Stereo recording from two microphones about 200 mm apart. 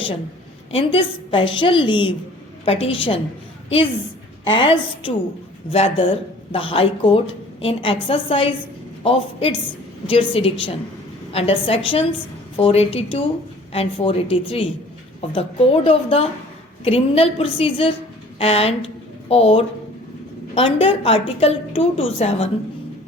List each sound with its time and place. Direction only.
0.7 s a woman's voice: 25° left (ahead or behind)
4.4 s a woman's voice: 25° left (ahead or behind)